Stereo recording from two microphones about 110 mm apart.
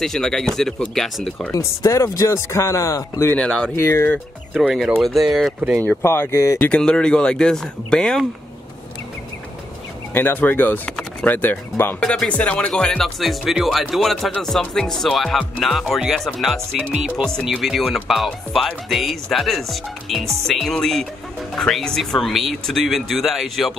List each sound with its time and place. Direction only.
0.0 s speech: 5° left (ahead or behind)
1.5 s speech: 30° left (ahead or behind)
3.3 s speech: 5° left (ahead or behind)
3.7 s speech: 25° left (ahead or behind)
4.6 s speech: 5° right (ahead or behind)
6.0 s speech: 25° left (ahead or behind)
6.7 s speech: 10° left (ahead or behind)
10.1 s speech: 15° left (ahead or behind)
12.0 s speech: 5° left (ahead or behind)